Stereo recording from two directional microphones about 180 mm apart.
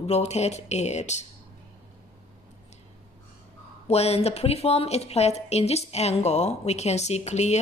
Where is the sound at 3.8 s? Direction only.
35° left (ahead or behind).